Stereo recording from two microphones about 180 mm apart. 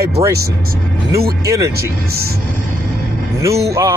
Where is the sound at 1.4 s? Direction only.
15° right (ahead or behind).